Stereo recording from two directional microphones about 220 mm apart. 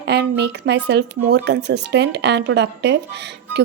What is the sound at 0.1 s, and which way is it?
Speech, 50° right (ahead or behind).